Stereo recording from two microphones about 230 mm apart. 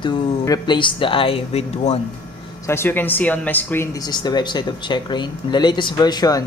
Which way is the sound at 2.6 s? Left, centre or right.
Centre.